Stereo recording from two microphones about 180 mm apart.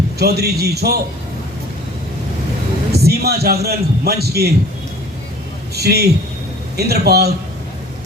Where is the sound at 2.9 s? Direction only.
60° right (ahead or behind).